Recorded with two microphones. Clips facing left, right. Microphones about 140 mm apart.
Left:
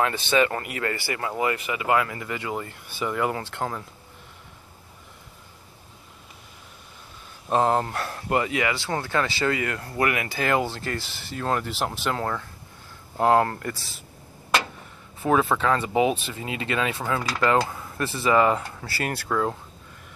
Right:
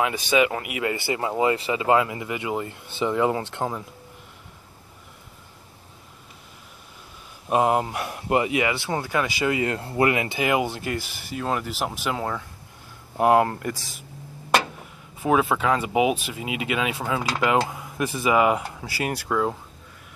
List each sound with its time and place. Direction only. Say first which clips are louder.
0.0 s speech: right 1 dB; 10° right (ahead or behind)
7.4 s speech: right 1 dB; 10° right (ahead or behind)
15.2 s speech: even; 5° right (ahead or behind)